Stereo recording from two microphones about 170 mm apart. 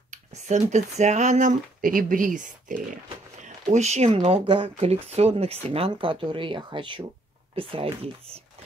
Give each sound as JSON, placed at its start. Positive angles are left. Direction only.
{"t": 0.1, "sound": "speech", "side_deg": -45}